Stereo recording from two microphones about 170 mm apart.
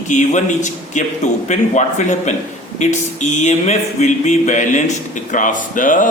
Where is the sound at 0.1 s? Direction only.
45° left (ahead or behind).